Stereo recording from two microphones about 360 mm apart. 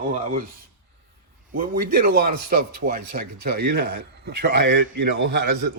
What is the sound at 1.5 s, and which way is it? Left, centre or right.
A man's voice, right.